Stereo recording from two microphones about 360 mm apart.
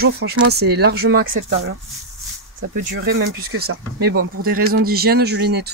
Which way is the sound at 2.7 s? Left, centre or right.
Right.